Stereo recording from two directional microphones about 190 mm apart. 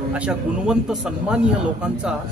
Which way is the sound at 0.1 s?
5° right (ahead or behind).